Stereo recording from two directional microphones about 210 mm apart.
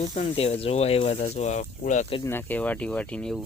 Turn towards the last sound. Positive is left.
turn(degrees=5)  # may be behind; listen again after turning